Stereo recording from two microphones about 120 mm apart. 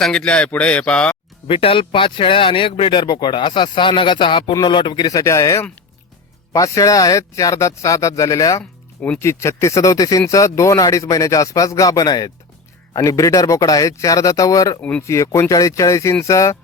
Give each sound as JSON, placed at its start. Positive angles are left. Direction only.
{"t": 0.0, "sound": "a man's voice", "side_deg": 5}
{"t": 1.5, "sound": "speech", "side_deg": 45}
{"t": 14.8, "sound": "a man's voice", "side_deg": 10}
{"t": 15.0, "sound": "speech", "side_deg": 25}